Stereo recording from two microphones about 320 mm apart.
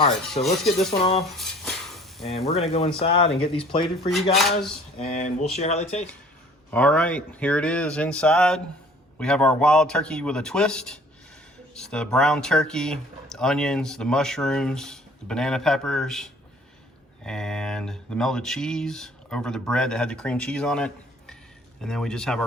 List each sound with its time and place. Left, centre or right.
0.0 s speech: centre
1.4 s stir: centre
2.2 s speech: centre
4.4 s speech: centre
4.9 s speech: left
6.7 s speech: centre